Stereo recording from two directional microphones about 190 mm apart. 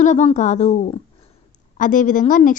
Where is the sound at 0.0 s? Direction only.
40° left (ahead or behind).